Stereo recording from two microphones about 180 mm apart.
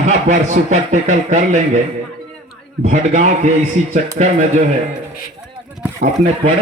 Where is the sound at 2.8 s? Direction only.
40° right (ahead or behind).